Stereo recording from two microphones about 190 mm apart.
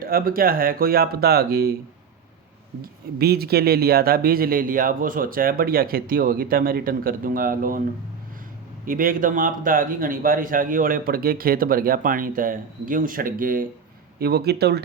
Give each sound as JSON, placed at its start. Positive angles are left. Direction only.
{"t": 0.0, "sound": "speech", "side_deg": -50}
{"t": 2.8, "sound": "speech", "side_deg": -55}
{"t": 8.9, "sound": "speech", "side_deg": -45}